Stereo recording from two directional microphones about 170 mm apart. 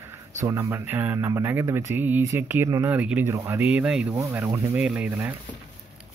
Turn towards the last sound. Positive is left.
turn(degrees=-10)  # may be behind; listen again after turning